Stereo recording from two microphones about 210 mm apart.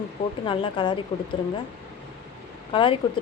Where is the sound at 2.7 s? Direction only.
25° left (ahead or behind).